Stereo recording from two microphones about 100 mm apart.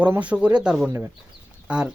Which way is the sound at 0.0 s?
15° right (ahead or behind).